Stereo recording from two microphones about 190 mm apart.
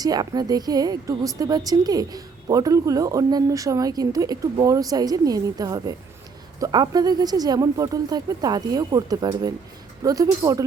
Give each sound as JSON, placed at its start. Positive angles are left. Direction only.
{"t": 0.0, "sound": "a woman's voice", "side_deg": -20}